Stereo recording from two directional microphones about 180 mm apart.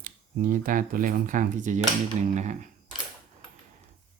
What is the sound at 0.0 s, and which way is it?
Speech, 50° right (ahead or behind).